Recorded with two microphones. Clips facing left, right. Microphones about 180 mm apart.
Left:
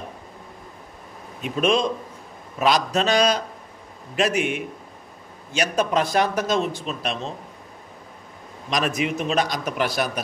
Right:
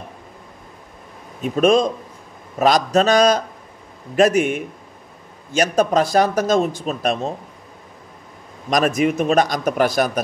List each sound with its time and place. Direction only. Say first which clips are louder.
1.4 s a man's voice: right 6 dB; 45° right (ahead or behind)
8.6 s a man's voice: right 6 dB; 45° right (ahead or behind)